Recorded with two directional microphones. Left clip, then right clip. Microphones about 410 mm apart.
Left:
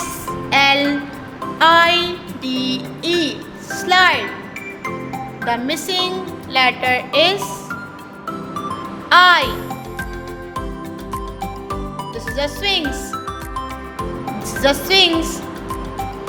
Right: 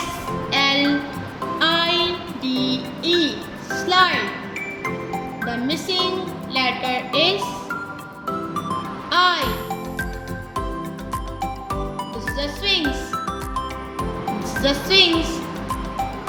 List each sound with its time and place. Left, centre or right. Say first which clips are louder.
0.5 s music: left 5 dB; centre
1.5 s child singing: left 7 dB; centre
3.8 s music: left 4 dB; centre
5.5 s music: left 5 dB; centre
9.0 s music: left 8 dB; centre
11.1 s music: even; centre
12.4 s music: left 3 dB; centre
14.4 s music: left 5 dB; centre